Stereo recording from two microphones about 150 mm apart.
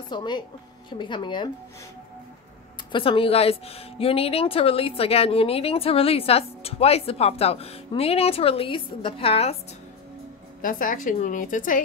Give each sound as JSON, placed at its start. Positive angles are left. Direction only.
{"t": 0.1, "sound": "a woman's voice", "side_deg": 30}
{"t": 2.9, "sound": "a woman's voice", "side_deg": 35}
{"t": 10.6, "sound": "a woman's voice", "side_deg": 65}